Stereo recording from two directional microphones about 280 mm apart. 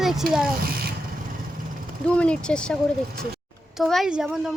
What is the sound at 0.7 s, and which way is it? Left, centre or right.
Vehicle, right.